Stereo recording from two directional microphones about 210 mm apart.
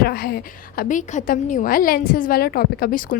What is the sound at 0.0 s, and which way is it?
A woman's voice, 45° left (ahead or behind).